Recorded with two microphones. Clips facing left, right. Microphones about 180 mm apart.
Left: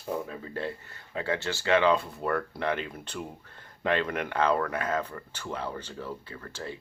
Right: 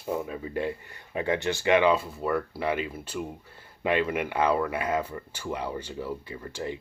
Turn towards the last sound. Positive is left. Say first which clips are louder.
# right 5 dB
turn(degrees=-15)  # may be behind; listen again after turning